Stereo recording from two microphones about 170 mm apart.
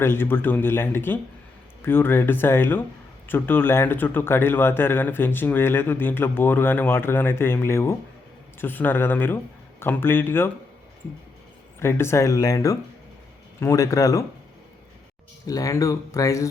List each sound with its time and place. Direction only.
0.0 s speech: 15° left (ahead or behind)
11.8 s speech: 15° left (ahead or behind)
15.4 s speech: 20° left (ahead or behind)